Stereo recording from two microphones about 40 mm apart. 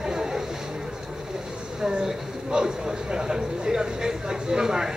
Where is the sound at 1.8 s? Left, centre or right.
Right.